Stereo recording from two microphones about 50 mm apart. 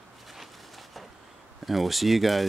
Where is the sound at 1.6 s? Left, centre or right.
Centre.